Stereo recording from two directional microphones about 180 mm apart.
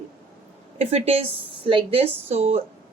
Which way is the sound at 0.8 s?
35° right (ahead or behind).